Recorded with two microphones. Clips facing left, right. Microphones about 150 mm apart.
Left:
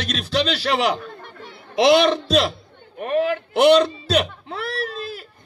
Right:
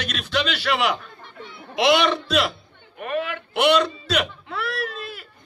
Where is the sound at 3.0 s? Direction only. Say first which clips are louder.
Left 6 dB; 35° left (ahead or behind).